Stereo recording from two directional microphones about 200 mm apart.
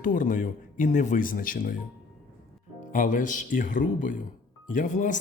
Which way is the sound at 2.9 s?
40° left (ahead or behind).